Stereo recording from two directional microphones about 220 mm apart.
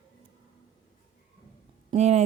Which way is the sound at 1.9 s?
30° right (ahead or behind).